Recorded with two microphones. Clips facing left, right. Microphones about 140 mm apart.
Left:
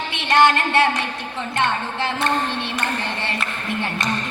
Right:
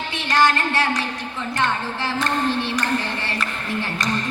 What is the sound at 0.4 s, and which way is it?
Child singing, 25° left (ahead or behind).